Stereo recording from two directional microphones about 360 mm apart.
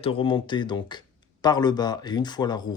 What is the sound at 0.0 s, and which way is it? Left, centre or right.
Speech, centre.